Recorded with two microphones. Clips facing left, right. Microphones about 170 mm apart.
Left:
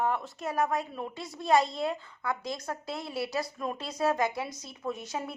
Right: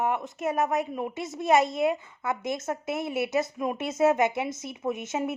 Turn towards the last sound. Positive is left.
turn(degrees=-20)  # may be behind; listen again after turning